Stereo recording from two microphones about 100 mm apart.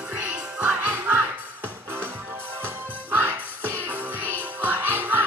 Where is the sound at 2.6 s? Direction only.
20° right (ahead or behind).